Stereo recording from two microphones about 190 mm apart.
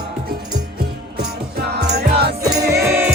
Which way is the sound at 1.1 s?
55° right (ahead or behind).